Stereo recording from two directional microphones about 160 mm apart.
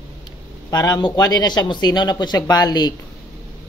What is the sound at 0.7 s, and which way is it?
Speech, 25° left (ahead or behind).